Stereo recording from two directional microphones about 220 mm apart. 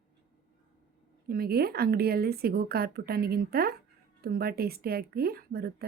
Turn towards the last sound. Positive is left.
turn(degrees=-45)  # may be behind; listen again after turning